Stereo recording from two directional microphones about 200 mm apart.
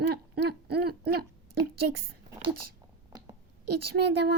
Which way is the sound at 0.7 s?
50° right (ahead or behind).